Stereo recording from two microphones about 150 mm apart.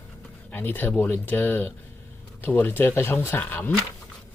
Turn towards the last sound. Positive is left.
turn(degrees=10)  # may be behind; listen again after turning